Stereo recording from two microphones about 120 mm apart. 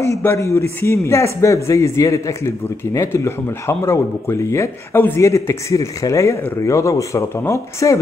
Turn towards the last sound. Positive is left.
turn(degrees=25)  # may be behind; listen again after turning